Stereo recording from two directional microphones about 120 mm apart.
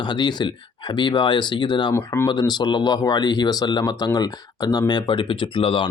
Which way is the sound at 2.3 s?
35° left (ahead or behind).